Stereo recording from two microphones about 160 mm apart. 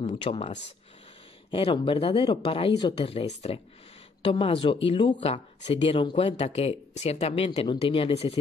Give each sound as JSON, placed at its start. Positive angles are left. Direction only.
{"t": 0.0, "sound": "speech", "side_deg": 35}